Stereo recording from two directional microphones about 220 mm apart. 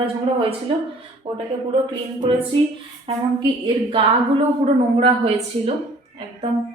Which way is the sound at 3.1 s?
25° right (ahead or behind).